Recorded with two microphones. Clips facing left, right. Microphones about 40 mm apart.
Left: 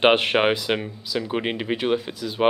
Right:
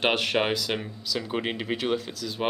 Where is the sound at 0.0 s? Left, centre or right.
Left.